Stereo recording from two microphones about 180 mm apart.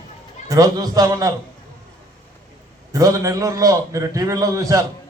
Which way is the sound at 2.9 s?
20° right (ahead or behind).